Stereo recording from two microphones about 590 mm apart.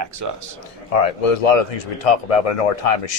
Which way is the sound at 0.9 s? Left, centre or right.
Left.